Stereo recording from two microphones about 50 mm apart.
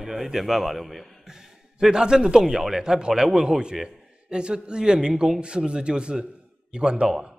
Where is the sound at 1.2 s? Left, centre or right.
Centre.